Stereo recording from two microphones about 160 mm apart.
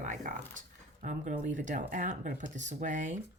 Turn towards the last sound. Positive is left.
turn(degrees=-50)  # may be behind; listen again after turning